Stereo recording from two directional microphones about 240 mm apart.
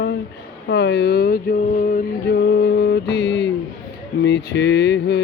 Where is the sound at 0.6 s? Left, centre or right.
Left.